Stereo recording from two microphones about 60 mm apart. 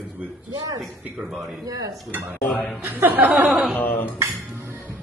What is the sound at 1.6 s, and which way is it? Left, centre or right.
Speech, right.